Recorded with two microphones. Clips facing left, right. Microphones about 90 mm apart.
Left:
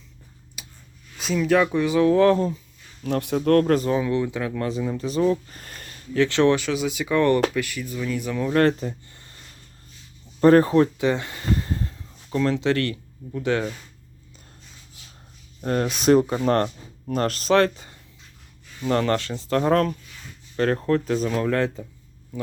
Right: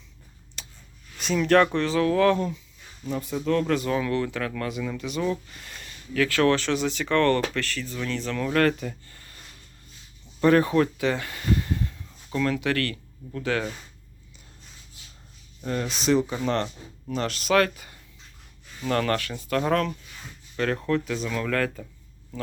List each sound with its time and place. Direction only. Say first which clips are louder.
0.6 s a sound: even; 10° left (ahead or behind)
1.2 s speech: even; centre (ahead or behind)
2.0 s speech: left 4 dB; 25° left (ahead or behind)
3.0 s speech: left 6 dB; 70° left (ahead or behind); by 3.8 s 45° left (ahead or behind)
3.8 s speech: left 3 dB; 20° left (ahead or behind); by 6.0 s 45° left (ahead or behind)
6.1 s speech: left 3 dB; 25° left (ahead or behind)
6.6 s speech: left 1 dB; 5° left (ahead or behind)
8.5 s speech: left 3 dB; 25° left (ahead or behind)
10.4 s speech: left 4 dB; 35° left (ahead or behind); by 13.7 s 20° left (ahead or behind)
15.6 s speech: left 6 dB; 50° left (ahead or behind); by 21.8 s 25° left (ahead or behind)